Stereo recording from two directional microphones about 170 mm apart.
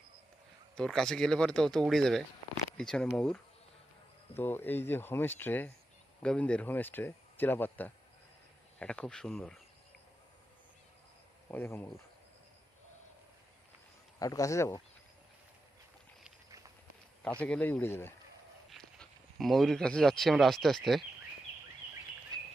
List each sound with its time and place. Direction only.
0.8 s speech: 5° left (ahead or behind)
4.4 s speech: 10° left (ahead or behind)
11.4 s speech: 10° left (ahead or behind)
14.2 s speech: 20° left (ahead or behind)
17.4 s speech: 10° left (ahead or behind)
18.7 s speech: centre (ahead or behind)